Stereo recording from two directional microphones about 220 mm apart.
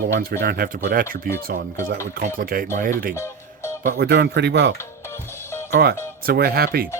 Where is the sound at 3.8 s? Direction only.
50° right (ahead or behind).